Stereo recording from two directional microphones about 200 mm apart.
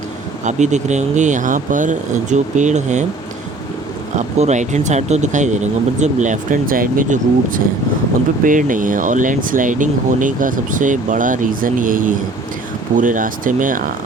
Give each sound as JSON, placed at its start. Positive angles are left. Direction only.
{"t": 0.4, "sound": "speech", "side_deg": -35}
{"t": 4.1, "sound": "speech", "side_deg": -35}